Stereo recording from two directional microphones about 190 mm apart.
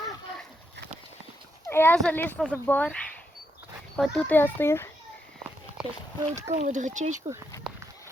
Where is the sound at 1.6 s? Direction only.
10° left (ahead or behind).